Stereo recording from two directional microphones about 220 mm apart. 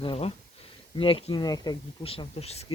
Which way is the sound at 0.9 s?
25° left (ahead or behind).